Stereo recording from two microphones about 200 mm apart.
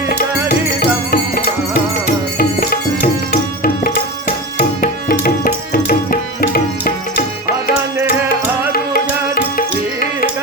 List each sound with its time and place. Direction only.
2.4 s music: 45° left (ahead or behind)
4.5 s music: 45° left (ahead or behind)
8.7 s music: 45° left (ahead or behind)